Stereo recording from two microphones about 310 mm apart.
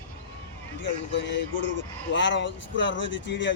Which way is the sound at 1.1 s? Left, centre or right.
Left.